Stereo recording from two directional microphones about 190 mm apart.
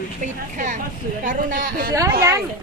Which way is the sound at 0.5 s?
40° right (ahead or behind).